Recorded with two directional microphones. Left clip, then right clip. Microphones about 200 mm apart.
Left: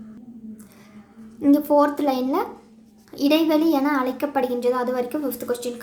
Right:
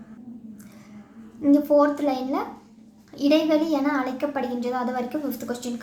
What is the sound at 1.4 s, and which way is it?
A child's voice, 25° left (ahead or behind).